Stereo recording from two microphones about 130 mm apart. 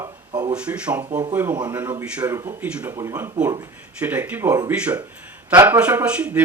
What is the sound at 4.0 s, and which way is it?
Speech, 10° right (ahead or behind).